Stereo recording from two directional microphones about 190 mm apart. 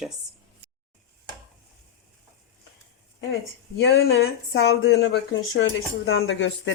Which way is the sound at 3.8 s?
60° left (ahead or behind).